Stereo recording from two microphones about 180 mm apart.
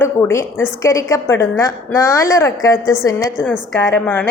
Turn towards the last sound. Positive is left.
turn(degrees=10)  # may be behind; listen again after turning